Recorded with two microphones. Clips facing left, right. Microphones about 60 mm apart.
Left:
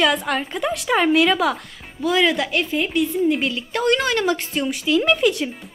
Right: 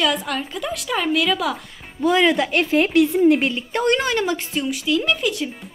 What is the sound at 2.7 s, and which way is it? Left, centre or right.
Speech, right.